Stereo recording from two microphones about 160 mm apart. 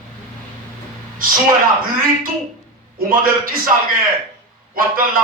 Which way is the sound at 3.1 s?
60° right (ahead or behind).